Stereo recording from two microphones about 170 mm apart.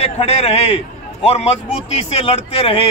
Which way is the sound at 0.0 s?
40° left (ahead or behind).